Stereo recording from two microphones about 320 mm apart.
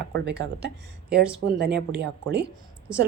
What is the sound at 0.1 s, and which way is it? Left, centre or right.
Speech, right.